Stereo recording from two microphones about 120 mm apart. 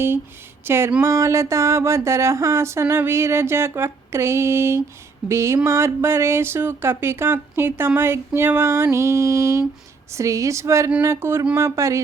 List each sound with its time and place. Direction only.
0.6 s speech: 20° right (ahead or behind)